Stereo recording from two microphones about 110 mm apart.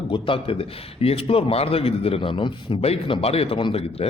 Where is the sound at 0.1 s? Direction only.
55° left (ahead or behind).